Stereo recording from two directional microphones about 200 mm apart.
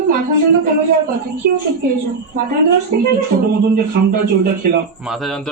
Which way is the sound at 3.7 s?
45° right (ahead or behind).